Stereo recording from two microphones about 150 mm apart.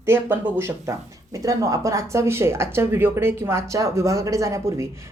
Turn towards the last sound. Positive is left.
turn(degrees=-20)  # may be behind; listen again after turning